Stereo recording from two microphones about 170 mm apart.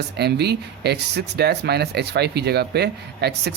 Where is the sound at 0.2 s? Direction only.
75° right (ahead or behind).